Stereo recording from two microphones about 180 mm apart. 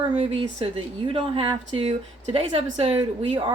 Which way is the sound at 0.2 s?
30° right (ahead or behind).